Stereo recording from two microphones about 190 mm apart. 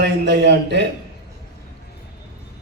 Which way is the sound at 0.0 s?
65° right (ahead or behind).